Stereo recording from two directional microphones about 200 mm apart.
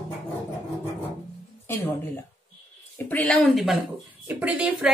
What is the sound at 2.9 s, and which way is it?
A woman's voice, 10° left (ahead or behind).